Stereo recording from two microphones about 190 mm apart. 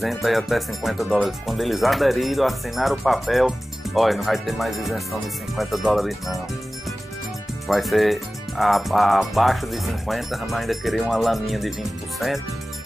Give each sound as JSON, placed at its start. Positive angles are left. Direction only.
{"t": 0.0, "sound": "speech", "side_deg": 0}
{"t": 7.6, "sound": "speech", "side_deg": 0}